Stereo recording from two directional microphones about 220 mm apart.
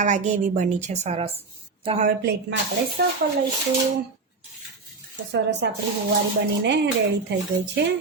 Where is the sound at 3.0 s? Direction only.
45° right (ahead or behind).